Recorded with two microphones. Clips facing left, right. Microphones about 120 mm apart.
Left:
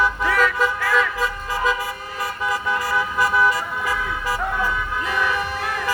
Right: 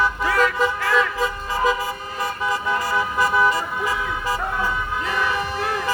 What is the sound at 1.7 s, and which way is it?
Vehicle, centre (ahead or behind).